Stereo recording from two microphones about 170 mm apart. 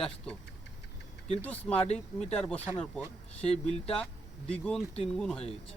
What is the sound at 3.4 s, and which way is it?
Speech, 40° left (ahead or behind).